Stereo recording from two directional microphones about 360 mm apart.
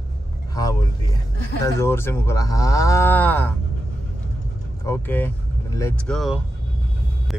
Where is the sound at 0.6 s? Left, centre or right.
Centre.